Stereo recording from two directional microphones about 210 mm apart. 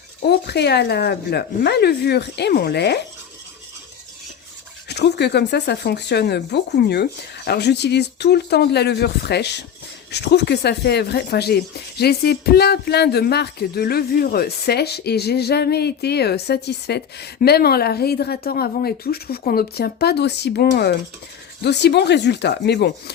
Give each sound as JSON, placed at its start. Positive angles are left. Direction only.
{"t": 0.3, "sound": "speech", "side_deg": 50}
{"t": 4.9, "sound": "speech", "side_deg": 55}